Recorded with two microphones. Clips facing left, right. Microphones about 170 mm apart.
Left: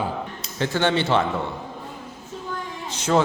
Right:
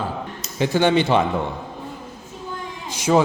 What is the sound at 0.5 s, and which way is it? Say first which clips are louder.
Speech: right 4 dB; 15° right (ahead or behind).